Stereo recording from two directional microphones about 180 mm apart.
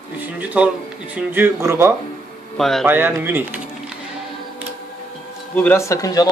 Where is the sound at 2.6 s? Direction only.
Centre (ahead or behind).